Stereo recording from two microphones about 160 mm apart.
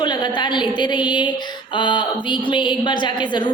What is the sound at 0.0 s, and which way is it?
A woman's voice, 25° left (ahead or behind).